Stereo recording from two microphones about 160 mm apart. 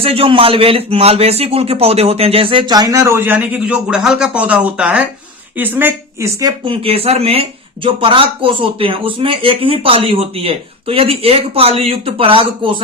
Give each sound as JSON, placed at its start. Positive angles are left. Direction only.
{"t": 0.0, "sound": "a man's voice", "side_deg": -35}
{"t": 6.7, "sound": "a man's voice", "side_deg": -35}